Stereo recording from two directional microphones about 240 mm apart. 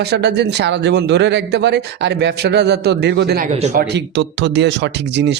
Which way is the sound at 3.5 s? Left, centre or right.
Right.